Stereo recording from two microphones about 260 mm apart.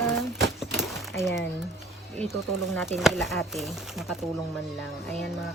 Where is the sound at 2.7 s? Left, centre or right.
Centre.